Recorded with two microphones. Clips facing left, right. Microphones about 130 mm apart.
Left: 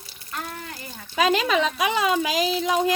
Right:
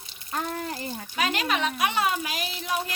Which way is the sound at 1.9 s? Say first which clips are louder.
Left 5 dB; 90° left.